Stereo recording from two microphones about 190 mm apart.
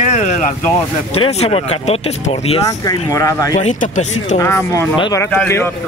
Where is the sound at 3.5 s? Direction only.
40° left (ahead or behind).